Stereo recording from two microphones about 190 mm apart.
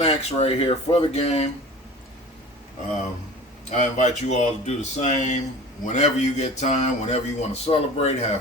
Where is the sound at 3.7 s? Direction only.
40° left (ahead or behind).